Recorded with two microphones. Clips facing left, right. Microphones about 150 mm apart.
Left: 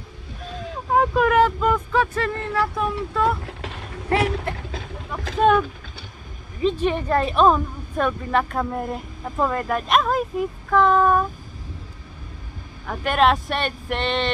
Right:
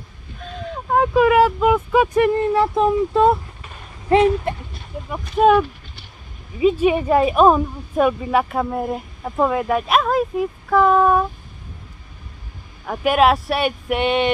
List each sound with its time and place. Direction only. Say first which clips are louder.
0.9 s speech: right 3 dB; centre (ahead or behind); by 3.3 s 20° right (ahead or behind)
3.4 s a sound: left 7 dB; 75° left (ahead or behind)
5.4 s speech: right 4 dB; 5° right (ahead or behind)
12.8 s speech: right 3 dB; 10° right (ahead or behind)